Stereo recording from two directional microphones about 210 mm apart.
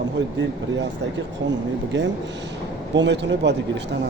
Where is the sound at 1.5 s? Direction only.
60° right (ahead or behind).